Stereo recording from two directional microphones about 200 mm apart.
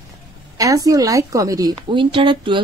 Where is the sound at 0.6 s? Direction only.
15° right (ahead or behind).